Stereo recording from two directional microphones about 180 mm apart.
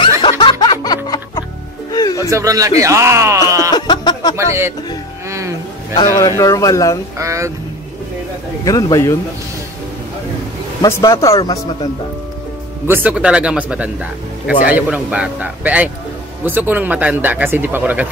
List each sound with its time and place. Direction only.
0.2 s music: 25° left (ahead or behind)
2.3 s a man's voice: 20° right (ahead or behind)
3.7 s a sound: 25° left (ahead or behind)
4.4 s speech: 15° right (ahead or behind)
5.3 s a sound: 15° right (ahead or behind)
5.9 s speech: 20° left (ahead or behind)
7.2 s speech: 15° right (ahead or behind)
8.6 s speech: 20° left (ahead or behind)
10.8 s speech: 20° left (ahead or behind)
12.8 s speech: 10° right (ahead or behind)